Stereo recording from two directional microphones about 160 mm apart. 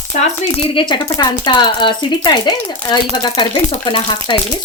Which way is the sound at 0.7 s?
30° left (ahead or behind).